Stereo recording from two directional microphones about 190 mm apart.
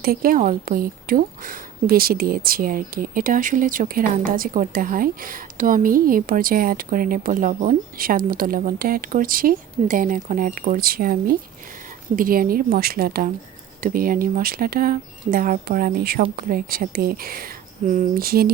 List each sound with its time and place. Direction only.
0.0 s a woman's voice: 50° right (ahead or behind)